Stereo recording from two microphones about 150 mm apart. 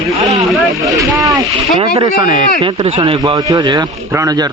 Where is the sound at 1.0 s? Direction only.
25° right (ahead or behind).